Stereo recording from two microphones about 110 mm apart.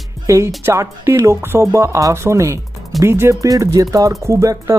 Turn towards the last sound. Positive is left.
turn(degrees=-30)  # may be behind; listen again after turning